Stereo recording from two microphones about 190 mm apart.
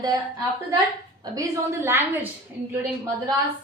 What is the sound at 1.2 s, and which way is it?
Speech, 20° right (ahead or behind).